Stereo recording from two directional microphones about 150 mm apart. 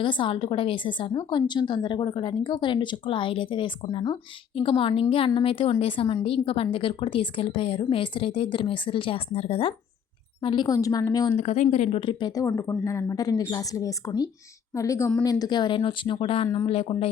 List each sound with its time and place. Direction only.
0.0 s a woman's voice: 35° left (ahead or behind)
11.3 s a woman's voice: 50° left (ahead or behind)
11.9 s a woman's voice: 35° left (ahead or behind)